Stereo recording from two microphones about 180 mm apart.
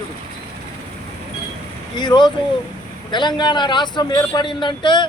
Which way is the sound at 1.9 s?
25° left (ahead or behind).